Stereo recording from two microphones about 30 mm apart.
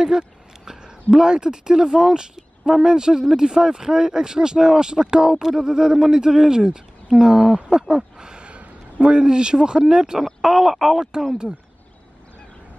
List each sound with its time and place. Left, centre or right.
0.7 s speech: right
7.9 s a sound: right
8.5 s a man's voice: right